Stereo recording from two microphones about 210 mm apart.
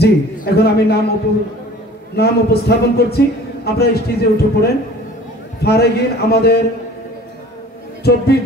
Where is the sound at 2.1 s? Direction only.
50° left (ahead or behind).